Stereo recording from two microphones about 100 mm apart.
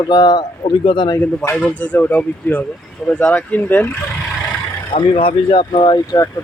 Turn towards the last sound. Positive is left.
turn(degrees=40)  # may be behind; listen again after turning